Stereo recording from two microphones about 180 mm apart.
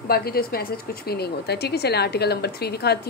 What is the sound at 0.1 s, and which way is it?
A woman's voice, 55° left (ahead or behind).